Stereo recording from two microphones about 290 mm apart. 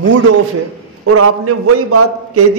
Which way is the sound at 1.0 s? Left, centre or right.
Right.